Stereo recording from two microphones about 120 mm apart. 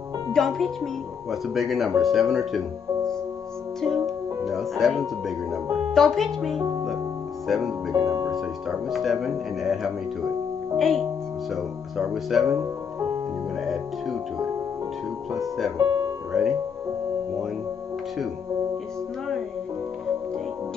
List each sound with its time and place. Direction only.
0.3 s speech: 5° left (ahead or behind)
3.8 s music: centre (ahead or behind)
5.9 s speech: centre (ahead or behind)
6.6 s music: 30° right (ahead or behind)
7.4 s speech: centre (ahead or behind)
7.9 s speech: 25° right (ahead or behind)
8.3 s speech: centre (ahead or behind)
12.5 s music: 20° right (ahead or behind)
15.3 s speech: centre (ahead or behind)
15.8 s music: 30° right (ahead or behind)
16.3 s speech: centre (ahead or behind)